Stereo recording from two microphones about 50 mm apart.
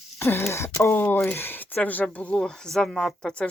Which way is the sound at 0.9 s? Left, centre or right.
Left.